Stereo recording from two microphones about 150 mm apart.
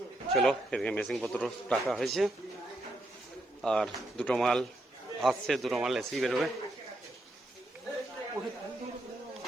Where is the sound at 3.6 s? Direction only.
5° left (ahead or behind).